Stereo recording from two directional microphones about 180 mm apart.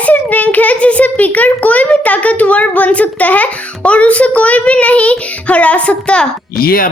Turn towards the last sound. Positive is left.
turn(degrees=55)  # may be behind; listen again after turning